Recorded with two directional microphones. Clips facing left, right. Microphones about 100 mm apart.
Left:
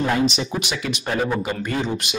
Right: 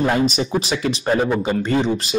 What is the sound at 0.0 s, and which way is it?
Speech, 40° right (ahead or behind).